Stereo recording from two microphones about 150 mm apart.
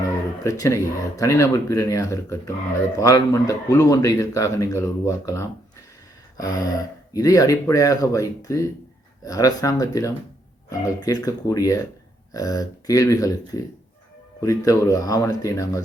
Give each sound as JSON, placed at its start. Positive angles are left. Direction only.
{"t": 0.4, "sound": "speech", "side_deg": 20}